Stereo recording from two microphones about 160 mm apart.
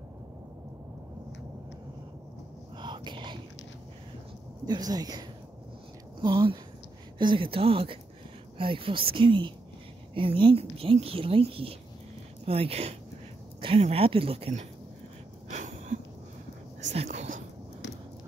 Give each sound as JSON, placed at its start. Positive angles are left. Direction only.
{"t": 2.8, "sound": "whispering", "side_deg": -30}
{"t": 4.6, "sound": "speech", "side_deg": -25}
{"t": 6.2, "sound": "a woman's voice", "side_deg": -30}
{"t": 15.5, "sound": "a sound", "side_deg": -50}